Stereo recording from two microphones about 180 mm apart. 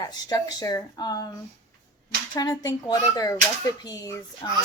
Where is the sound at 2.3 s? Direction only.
20° left (ahead or behind).